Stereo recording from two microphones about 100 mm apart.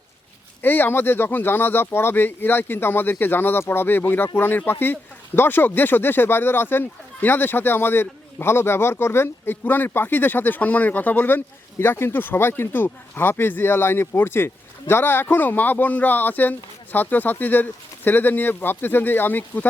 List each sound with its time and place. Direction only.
0.6 s speech: 20° left (ahead or behind)